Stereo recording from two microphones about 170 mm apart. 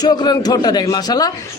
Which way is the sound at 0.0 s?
25° left (ahead or behind).